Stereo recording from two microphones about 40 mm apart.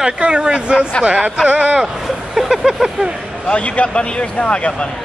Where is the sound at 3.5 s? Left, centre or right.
Left.